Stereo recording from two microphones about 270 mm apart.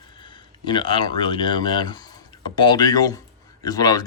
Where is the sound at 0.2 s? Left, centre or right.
Centre.